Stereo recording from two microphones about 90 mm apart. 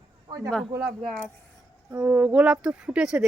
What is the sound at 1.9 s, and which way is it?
Speech, 15° right (ahead or behind).